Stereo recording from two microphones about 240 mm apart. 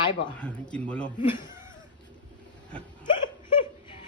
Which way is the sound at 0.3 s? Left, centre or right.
Centre.